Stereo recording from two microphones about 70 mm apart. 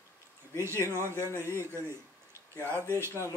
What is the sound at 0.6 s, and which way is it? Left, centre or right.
Speech, right.